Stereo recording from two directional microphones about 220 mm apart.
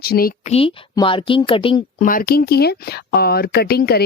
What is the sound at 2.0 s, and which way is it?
Speech, 40° left (ahead or behind).